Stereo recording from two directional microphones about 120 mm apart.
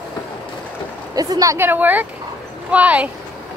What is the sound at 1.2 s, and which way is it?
Speech, 30° right (ahead or behind).